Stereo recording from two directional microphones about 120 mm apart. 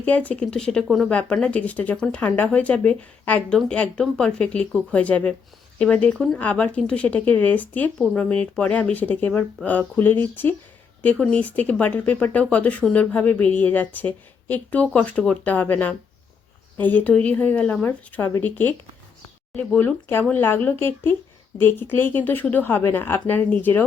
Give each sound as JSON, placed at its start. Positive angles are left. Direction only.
{"t": 0.0, "sound": "speech", "side_deg": 10}